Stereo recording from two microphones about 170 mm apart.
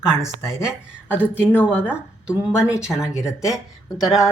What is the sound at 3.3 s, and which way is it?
Speech, 5° right (ahead or behind).